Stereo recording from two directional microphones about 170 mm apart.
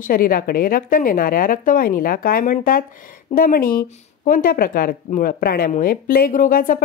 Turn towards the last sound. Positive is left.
turn(degrees=55)  # may be behind; listen again after turning